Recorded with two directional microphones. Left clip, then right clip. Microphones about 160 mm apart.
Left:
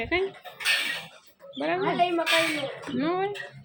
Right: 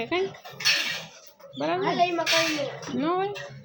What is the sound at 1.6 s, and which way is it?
A woman's voice, 10° right (ahead or behind).